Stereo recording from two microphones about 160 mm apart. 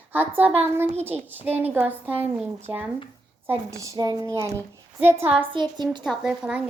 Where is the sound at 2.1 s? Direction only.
35° right (ahead or behind).